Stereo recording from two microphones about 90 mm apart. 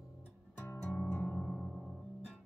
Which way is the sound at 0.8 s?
15° left (ahead or behind).